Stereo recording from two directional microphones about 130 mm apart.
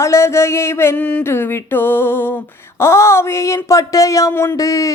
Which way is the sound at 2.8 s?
20° left (ahead or behind).